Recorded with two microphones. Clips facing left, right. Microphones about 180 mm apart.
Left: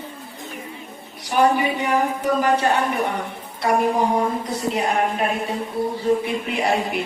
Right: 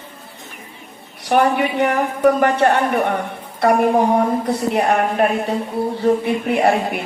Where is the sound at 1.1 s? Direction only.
60° right (ahead or behind).